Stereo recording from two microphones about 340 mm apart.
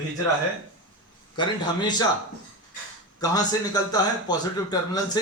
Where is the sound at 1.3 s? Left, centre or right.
Centre.